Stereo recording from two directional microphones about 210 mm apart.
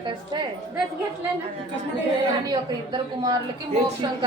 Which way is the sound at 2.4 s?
20° right (ahead or behind).